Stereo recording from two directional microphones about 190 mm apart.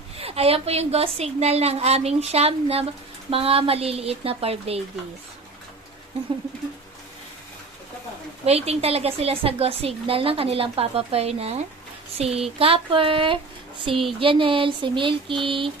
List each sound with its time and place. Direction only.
0.2 s a woman's voice: 30° right (ahead or behind)
8.4 s a woman's voice: 35° right (ahead or behind)